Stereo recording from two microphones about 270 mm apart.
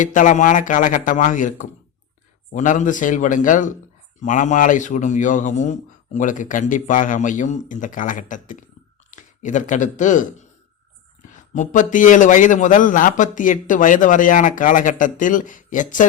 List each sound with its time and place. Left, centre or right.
0.0 s a man's voice: left
11.3 s a man's voice: left